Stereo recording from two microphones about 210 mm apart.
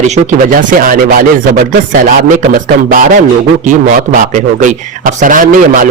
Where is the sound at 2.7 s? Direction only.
40° right (ahead or behind).